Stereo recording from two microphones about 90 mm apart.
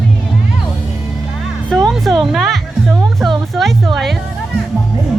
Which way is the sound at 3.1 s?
Centre (ahead or behind).